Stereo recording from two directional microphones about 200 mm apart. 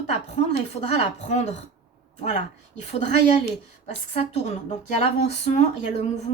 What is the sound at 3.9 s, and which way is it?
Speech, 35° left (ahead or behind).